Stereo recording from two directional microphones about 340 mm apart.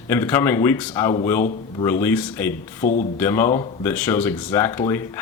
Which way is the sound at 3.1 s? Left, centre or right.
Centre.